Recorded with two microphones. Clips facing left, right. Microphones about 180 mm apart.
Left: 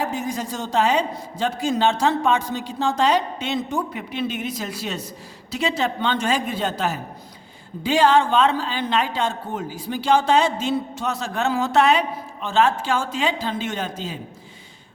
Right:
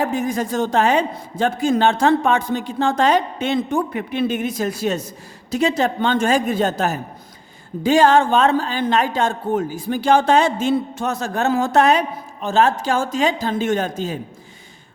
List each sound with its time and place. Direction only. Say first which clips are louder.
0.0 s a man's voice: right 5 dB; 55° right (ahead or behind)